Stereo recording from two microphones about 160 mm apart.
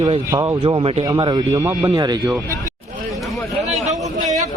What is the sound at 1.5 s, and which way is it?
Speech, 15° right (ahead or behind).